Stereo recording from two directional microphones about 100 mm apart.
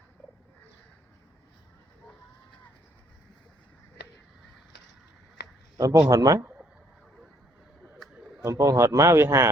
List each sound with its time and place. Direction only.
5.7 s a man's voice: 35° right (ahead or behind)
8.4 s a man's voice: 30° right (ahead or behind)